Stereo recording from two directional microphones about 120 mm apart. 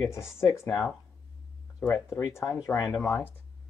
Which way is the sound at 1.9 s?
20° left (ahead or behind).